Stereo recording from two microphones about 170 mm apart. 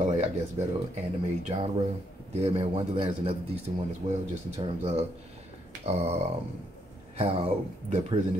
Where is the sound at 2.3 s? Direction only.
35° right (ahead or behind).